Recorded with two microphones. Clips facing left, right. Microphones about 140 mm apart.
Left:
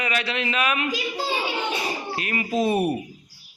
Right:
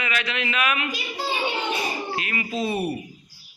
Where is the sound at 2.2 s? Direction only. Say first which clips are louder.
Left 2 dB; 40° left (ahead or behind).